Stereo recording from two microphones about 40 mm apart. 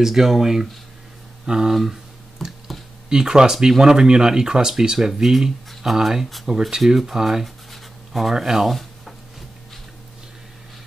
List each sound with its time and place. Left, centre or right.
0.0 s speech: centre
1.7 s a sound: centre
3.1 s speech: centre
6.5 s speech: right
7.0 s speech: centre
7.4 s writing: centre